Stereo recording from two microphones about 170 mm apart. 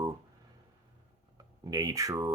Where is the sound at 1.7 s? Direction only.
20° right (ahead or behind).